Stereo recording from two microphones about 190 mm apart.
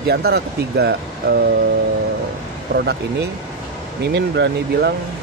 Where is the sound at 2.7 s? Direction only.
60° right (ahead or behind).